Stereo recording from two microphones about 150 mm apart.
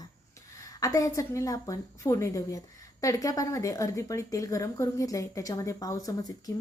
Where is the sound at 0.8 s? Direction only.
20° left (ahead or behind).